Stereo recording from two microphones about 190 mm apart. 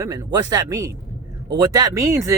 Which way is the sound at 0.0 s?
20° right (ahead or behind).